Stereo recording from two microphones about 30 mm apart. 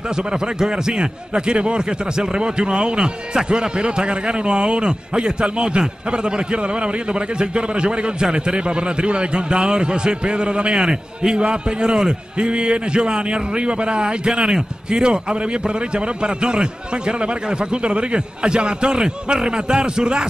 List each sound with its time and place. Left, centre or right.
0.1 s speech: right